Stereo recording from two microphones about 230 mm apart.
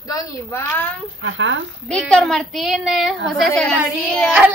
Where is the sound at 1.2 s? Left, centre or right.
Right.